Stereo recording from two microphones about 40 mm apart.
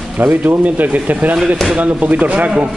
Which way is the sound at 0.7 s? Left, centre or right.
Right.